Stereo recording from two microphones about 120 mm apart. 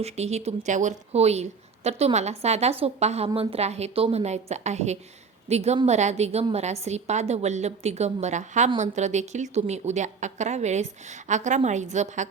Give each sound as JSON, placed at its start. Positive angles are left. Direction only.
{"t": 0.0, "sound": "a woman's voice", "side_deg": -65}